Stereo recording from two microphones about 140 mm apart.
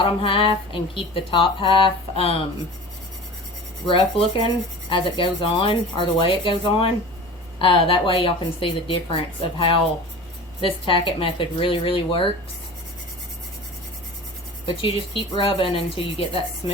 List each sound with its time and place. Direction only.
0.0 s speech: 40° left (ahead or behind)
3.8 s speech: 40° left (ahead or behind)
14.7 s speech: 40° left (ahead or behind)